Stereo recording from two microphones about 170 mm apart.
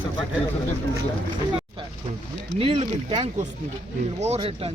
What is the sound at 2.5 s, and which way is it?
A man's voice, 35° right (ahead or behind).